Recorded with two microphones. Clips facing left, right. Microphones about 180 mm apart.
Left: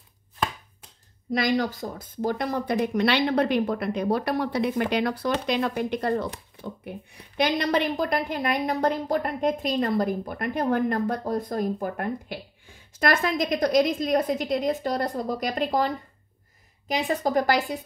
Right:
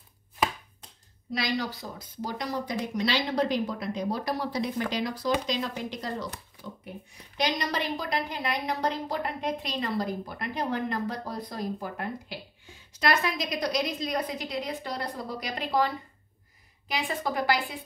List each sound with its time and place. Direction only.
1.3 s speech: 50° left (ahead or behind)
7.3 s a woman's voice: 55° left (ahead or behind)